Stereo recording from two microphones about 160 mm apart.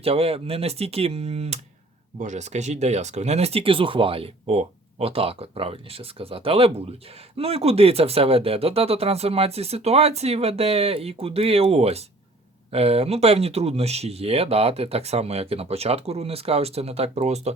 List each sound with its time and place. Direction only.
0.0 s speech: 35° right (ahead or behind)